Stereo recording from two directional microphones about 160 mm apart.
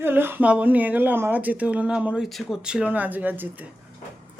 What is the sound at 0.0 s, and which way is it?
Speech, 15° right (ahead or behind).